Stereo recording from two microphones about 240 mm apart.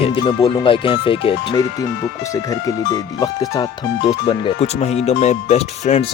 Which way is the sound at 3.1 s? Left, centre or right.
Centre.